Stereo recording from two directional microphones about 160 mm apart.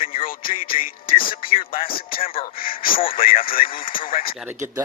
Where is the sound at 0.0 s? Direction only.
35° left (ahead or behind).